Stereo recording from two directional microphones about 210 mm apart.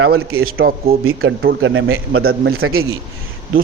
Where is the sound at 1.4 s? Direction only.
55° right (ahead or behind).